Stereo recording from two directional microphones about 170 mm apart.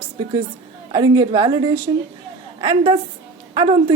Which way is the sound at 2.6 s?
30° right (ahead or behind).